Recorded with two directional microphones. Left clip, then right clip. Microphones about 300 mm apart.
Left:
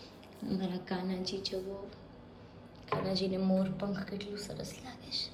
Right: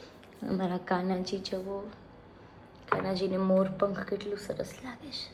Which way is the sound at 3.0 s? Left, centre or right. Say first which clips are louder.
Right 3 dB; centre.